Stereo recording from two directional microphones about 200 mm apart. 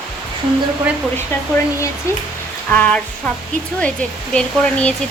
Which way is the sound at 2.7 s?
5° left (ahead or behind).